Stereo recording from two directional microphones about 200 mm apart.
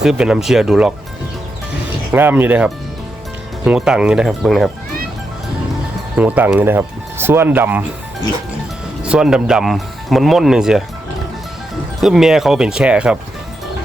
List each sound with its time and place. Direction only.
0.0 s speech: 5° right (ahead or behind)
2.1 s speech: 10° right (ahead or behind)
6.1 s speech: 10° right (ahead or behind)
9.0 s speech: 5° right (ahead or behind)
11.9 s speech: centre (ahead or behind)